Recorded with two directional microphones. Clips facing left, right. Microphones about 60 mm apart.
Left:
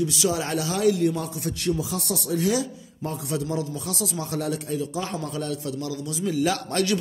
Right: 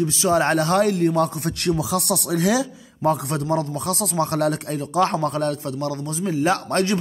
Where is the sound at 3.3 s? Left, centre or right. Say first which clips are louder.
Right 4 dB; right.